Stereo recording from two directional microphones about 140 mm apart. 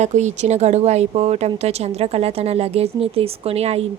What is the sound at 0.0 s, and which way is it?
Speech, 55° right (ahead or behind).